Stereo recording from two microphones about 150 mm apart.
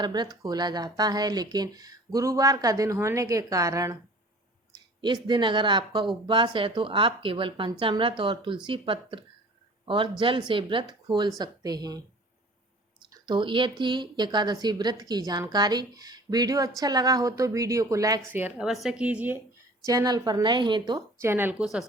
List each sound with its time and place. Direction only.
0.0 s a woman's voice: 30° right (ahead or behind); by 19.4 s 10° right (ahead or behind)
19.8 s speech: 20° right (ahead or behind)
21.2 s speech: 15° right (ahead or behind)